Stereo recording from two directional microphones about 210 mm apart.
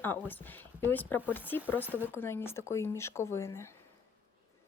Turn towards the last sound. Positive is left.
turn(degrees=15)  # may be behind; listen again after turning